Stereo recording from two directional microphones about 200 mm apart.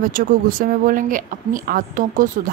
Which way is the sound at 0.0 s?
45° right (ahead or behind).